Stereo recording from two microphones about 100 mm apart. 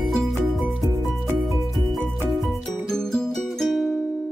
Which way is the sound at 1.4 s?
Centre (ahead or behind).